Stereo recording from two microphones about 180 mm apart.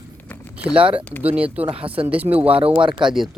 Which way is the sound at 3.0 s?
Centre (ahead or behind).